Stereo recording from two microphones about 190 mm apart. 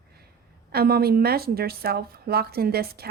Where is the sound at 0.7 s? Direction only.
55° right (ahead or behind).